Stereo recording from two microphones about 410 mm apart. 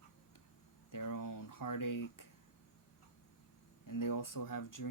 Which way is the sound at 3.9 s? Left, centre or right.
Left.